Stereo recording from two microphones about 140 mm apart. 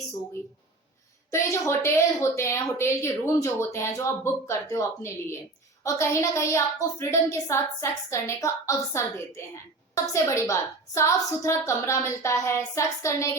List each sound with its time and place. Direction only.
1.3 s a woman's voice: 20° left (ahead or behind)